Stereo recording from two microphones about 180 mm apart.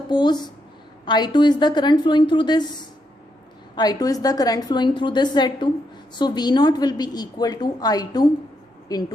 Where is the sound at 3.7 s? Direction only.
20° left (ahead or behind).